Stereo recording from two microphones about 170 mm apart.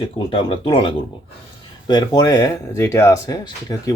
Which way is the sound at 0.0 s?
30° left (ahead or behind).